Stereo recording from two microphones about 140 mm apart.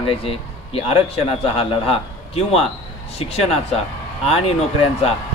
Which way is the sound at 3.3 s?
45° left (ahead or behind).